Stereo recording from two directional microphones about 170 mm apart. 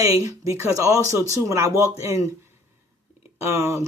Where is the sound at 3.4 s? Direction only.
15° right (ahead or behind).